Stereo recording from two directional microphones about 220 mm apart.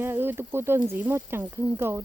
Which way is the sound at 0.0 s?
10° right (ahead or behind).